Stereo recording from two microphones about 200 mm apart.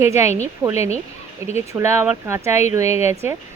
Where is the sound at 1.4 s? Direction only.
15° right (ahead or behind).